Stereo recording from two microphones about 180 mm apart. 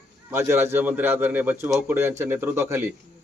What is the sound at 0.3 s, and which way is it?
A man's voice, 15° right (ahead or behind).